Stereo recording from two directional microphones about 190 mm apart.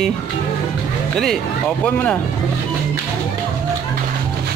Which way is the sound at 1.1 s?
Centre (ahead or behind).